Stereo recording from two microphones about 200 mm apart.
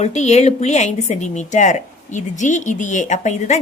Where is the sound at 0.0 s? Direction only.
35° left (ahead or behind).